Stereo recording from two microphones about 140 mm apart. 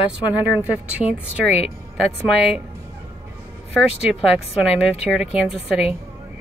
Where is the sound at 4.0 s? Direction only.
5° right (ahead or behind).